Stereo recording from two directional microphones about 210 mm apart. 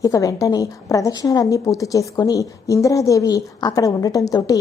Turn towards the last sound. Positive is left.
turn(degrees=15)  # may be behind; listen again after turning